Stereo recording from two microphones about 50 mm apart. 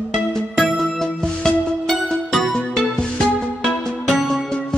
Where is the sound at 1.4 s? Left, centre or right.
Centre.